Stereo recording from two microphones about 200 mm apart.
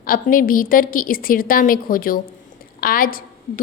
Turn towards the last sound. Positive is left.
turn(degrees=45)  # may be behind; listen again after turning